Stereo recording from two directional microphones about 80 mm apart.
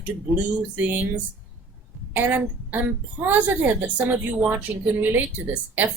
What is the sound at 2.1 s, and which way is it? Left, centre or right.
A woman's voice, right.